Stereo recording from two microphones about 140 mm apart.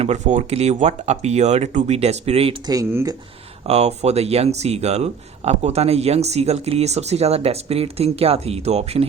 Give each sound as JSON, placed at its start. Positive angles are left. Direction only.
{"t": 0.0, "sound": "speech", "side_deg": -55}
{"t": 2.6, "sound": "speech", "side_deg": -20}
{"t": 3.7, "sound": "speech", "side_deg": -50}